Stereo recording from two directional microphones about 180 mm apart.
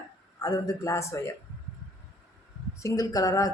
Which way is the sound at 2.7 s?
20° left (ahead or behind).